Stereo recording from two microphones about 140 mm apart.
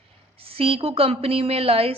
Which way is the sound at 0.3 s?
40° right (ahead or behind).